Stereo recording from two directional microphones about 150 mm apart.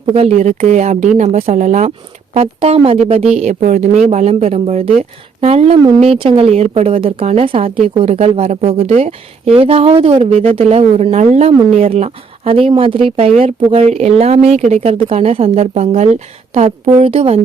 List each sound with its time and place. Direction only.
0.0 s a woman's voice: 40° right (ahead or behind)
0.3 s speech: 50° right (ahead or behind)
2.3 s a woman's voice: 40° right (ahead or behind)
3.3 s a woman's voice: 55° right (ahead or behind)